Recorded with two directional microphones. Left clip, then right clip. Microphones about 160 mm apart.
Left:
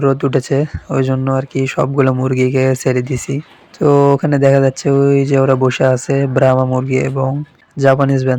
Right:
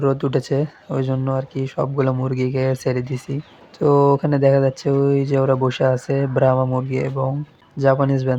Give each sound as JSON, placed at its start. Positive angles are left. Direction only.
{"t": 0.0, "sound": "speech", "side_deg": 15}